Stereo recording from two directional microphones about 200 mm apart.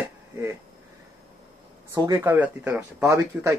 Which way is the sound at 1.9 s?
15° right (ahead or behind).